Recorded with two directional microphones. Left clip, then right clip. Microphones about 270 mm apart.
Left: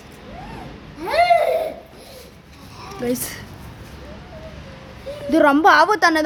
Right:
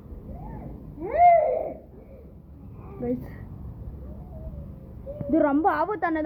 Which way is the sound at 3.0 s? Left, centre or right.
Left.